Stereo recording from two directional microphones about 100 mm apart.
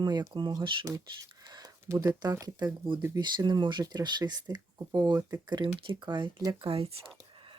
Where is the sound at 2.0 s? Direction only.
40° right (ahead or behind); by 7.0 s 75° right (ahead or behind).